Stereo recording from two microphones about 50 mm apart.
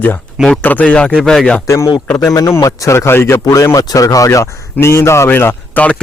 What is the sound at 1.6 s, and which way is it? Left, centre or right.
Speech, left.